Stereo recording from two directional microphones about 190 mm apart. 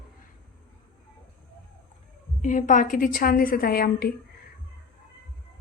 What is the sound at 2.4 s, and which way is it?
A woman's voice, 40° left (ahead or behind).